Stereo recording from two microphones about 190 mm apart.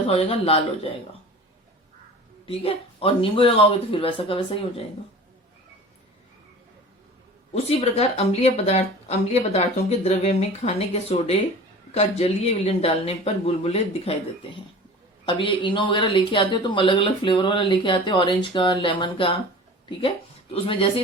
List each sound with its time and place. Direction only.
0.1 s speech: 30° left (ahead or behind)
2.5 s speech: 30° left (ahead or behind)
7.5 s speech: 30° left (ahead or behind)
15.3 s speech: 25° left (ahead or behind)
20.5 s speech: 30° left (ahead or behind)